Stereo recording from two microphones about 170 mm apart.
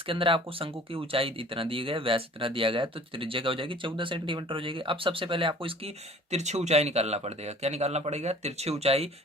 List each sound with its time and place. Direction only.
0.1 s speech: 30° right (ahead or behind)
6.3 s speech: 40° right (ahead or behind)